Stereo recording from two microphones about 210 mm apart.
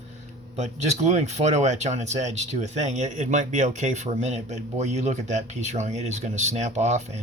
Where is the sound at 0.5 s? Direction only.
30° right (ahead or behind).